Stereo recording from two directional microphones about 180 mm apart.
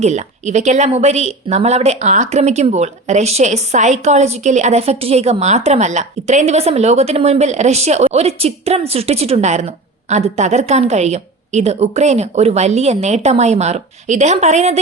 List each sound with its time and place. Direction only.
0.0 s a woman's voice: 40° right (ahead or behind)